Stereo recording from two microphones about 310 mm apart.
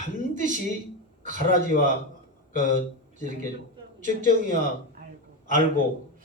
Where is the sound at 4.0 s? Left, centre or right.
Right.